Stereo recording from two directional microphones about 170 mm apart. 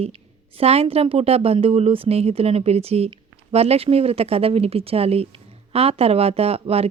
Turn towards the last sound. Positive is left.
turn(degrees=-35)  # may be behind; listen again after turning